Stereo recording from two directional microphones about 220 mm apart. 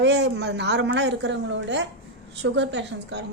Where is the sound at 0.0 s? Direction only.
50° right (ahead or behind).